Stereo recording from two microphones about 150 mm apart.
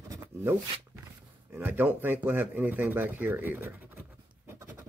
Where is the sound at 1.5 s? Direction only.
10° right (ahead or behind).